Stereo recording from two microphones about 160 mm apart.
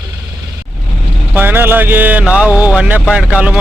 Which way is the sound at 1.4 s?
10° right (ahead or behind).